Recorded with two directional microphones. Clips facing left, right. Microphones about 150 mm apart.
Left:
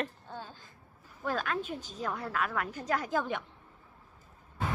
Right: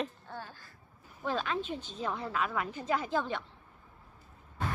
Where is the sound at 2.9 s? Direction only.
10° left (ahead or behind).